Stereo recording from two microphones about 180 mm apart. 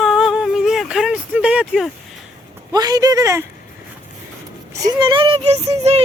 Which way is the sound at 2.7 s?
20° right (ahead or behind).